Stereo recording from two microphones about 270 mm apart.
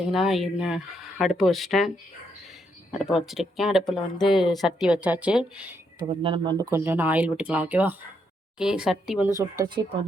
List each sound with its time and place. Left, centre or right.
0.1 s speech: centre
3.1 s speech: centre
6.0 s speech: centre
9.4 s speech: centre